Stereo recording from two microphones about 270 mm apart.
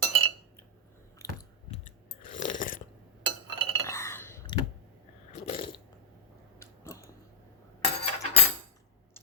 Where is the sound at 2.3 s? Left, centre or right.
Left.